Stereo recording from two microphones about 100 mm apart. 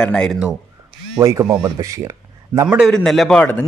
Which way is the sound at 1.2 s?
35° right (ahead or behind).